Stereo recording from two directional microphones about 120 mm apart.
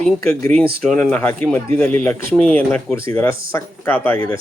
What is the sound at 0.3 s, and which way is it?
Speech, 15° left (ahead or behind).